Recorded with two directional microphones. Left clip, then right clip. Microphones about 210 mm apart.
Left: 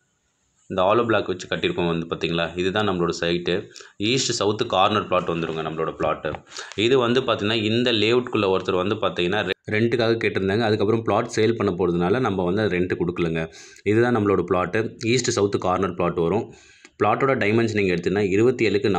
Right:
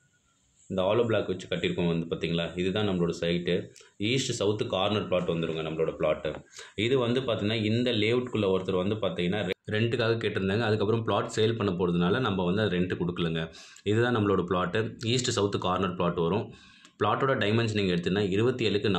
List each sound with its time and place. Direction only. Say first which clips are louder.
0.7 s a man's voice: left 7 dB; 15° left (ahead or behind)
9.7 s speech: left 6 dB; 25° left (ahead or behind)